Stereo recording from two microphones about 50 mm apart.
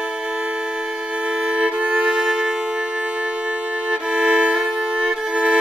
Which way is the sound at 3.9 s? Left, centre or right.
Centre.